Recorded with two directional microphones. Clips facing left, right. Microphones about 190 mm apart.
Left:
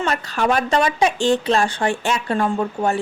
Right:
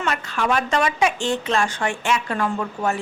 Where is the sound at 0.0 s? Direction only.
40° left (ahead or behind).